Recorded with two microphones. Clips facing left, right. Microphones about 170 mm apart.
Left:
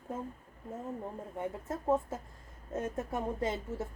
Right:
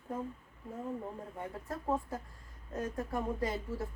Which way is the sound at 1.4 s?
20° left (ahead or behind).